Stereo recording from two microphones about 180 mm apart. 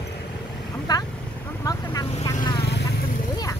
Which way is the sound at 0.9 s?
20° left (ahead or behind).